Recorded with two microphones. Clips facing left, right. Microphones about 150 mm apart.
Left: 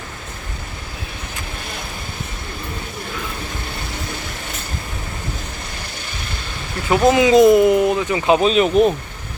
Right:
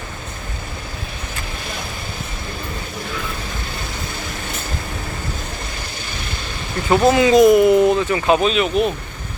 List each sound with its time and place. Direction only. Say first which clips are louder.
7.0 s speech: left 1 dB; 15° left (ahead or behind)
7.8 s speech: right 2 dB; 10° left (ahead or behind)
8.4 s speech: left 3 dB; 35° left (ahead or behind)